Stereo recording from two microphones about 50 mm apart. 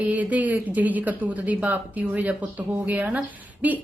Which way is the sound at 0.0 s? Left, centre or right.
Right.